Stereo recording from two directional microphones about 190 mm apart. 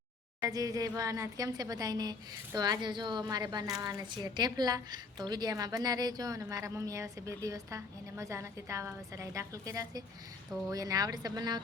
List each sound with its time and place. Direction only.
0.4 s a woman's voice: 20° right (ahead or behind)